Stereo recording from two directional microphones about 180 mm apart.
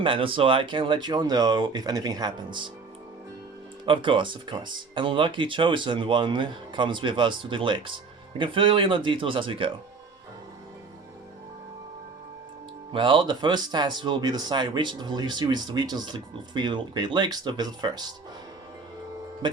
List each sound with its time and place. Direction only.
0.0 s speech: 30° right (ahead or behind)
3.8 s speech: 30° right (ahead or behind)
12.9 s speech: 25° right (ahead or behind)